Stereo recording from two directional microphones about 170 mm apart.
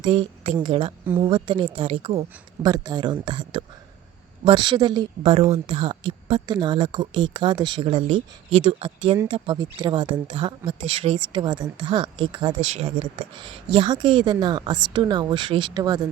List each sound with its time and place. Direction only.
0.0 s speech: 30° right (ahead or behind)
12.5 s speech: 40° right (ahead or behind)
13.7 s speech: 25° right (ahead or behind)